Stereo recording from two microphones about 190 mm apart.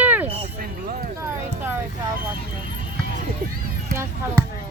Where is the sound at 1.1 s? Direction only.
10° right (ahead or behind).